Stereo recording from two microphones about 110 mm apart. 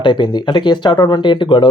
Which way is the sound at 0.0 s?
45° left (ahead or behind).